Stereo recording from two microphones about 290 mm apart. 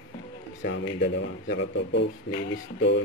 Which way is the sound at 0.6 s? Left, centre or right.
Left.